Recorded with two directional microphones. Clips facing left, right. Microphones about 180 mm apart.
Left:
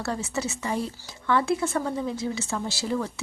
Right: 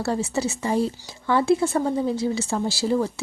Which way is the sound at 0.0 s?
30° right (ahead or behind).